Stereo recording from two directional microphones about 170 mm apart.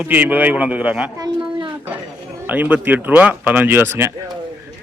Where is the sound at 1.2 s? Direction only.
25° right (ahead or behind).